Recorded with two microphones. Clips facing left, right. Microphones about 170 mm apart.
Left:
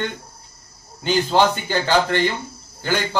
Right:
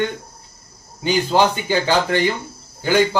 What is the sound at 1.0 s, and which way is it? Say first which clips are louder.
A man's voice: right 1 dB; 10° right (ahead or behind).